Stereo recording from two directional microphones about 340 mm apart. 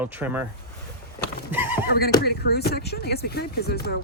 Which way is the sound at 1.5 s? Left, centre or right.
Centre.